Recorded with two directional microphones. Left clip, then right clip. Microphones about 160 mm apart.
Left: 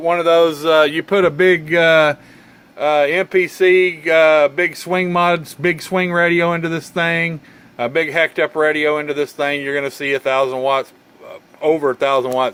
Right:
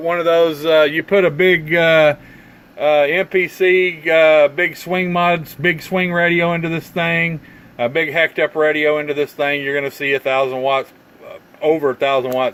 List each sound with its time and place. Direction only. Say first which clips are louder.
0.0 s speech: left 1 dB; 25° left (ahead or behind)